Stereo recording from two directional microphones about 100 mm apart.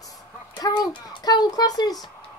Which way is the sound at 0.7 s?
40° left (ahead or behind).